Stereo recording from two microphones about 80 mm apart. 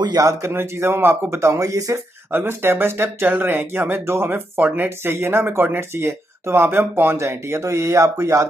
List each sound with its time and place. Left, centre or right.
0.2 s speech: right
2.3 s speech: right